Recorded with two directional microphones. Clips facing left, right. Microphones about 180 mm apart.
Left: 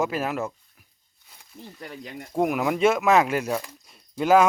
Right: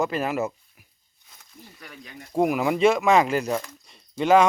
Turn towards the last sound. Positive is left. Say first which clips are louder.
# even
turn(degrees=5)  # may be behind; listen again after turning